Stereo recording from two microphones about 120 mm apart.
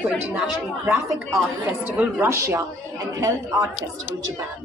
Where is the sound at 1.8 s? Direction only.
20° right (ahead or behind).